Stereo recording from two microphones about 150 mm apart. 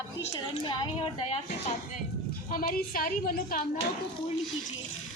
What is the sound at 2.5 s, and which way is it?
A woman's voice, 75° left (ahead or behind).